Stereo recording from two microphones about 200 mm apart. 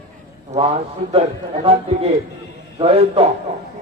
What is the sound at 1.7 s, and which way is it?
A man's voice, 30° right (ahead or behind).